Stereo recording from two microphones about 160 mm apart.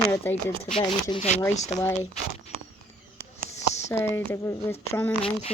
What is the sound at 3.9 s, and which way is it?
Speech, 15° left (ahead or behind).